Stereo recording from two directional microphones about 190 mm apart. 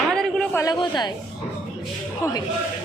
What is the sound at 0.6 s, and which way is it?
Speech, 20° left (ahead or behind).